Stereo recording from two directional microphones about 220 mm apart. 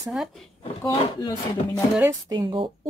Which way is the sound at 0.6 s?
20° left (ahead or behind).